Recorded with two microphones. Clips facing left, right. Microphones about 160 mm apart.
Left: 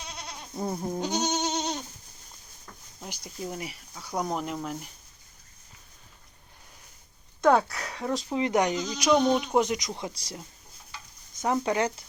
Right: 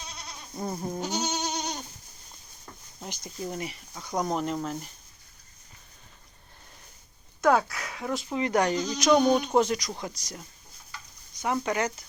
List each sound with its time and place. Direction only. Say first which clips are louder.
0.5 s speech: left 2 dB; centre (ahead or behind)
0.9 s goat: left 4 dB; 15° left (ahead or behind)
3.1 s speech: right 1 dB; 5° left (ahead or behind)
7.4 s speech: left 1 dB; centre (ahead or behind)
7.9 s speech: left 2 dB; 35° left (ahead or behind)
8.3 s speech: even; 20° left (ahead or behind)
8.7 s speech: right 2 dB; 10° left (ahead or behind)
9.1 s speech: right 1 dB; centre (ahead or behind)
9.4 s speech: right 1 dB; 10° left (ahead or behind); by 10.4 s 25° left (ahead or behind)
11.6 s speech: left 2 dB; 30° left (ahead or behind)